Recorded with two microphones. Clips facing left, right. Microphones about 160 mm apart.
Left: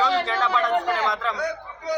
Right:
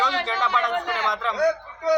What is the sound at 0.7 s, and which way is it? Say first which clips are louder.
Speech: left 4 dB; 40° left (ahead or behind).